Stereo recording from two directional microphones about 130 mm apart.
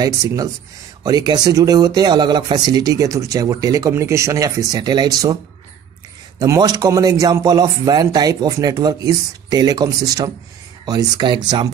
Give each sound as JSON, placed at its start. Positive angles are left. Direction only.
{"t": 0.0, "sound": "speech", "side_deg": -30}
{"t": 6.4, "sound": "speech", "side_deg": -25}